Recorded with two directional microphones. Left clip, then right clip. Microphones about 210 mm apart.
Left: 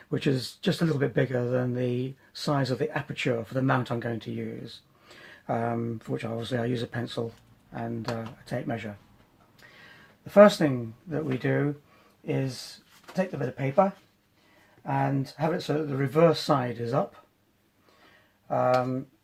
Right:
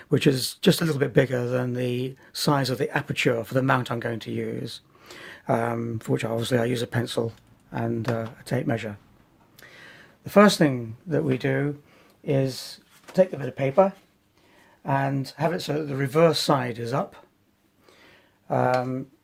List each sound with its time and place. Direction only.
0.1 s speech: 50° right (ahead or behind)
10.2 s speech: 50° right (ahead or behind)
14.8 s speech: 50° right (ahead or behind)
18.4 s speech: 45° right (ahead or behind)